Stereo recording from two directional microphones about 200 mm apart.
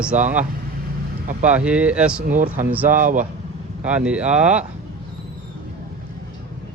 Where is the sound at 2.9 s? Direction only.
40° right (ahead or behind).